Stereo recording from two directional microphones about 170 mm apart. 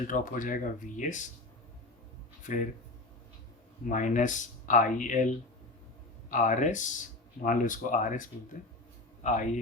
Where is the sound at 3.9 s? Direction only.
50° left (ahead or behind).